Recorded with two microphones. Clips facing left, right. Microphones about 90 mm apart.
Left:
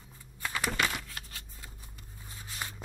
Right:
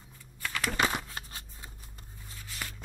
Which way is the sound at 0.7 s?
30° right (ahead or behind).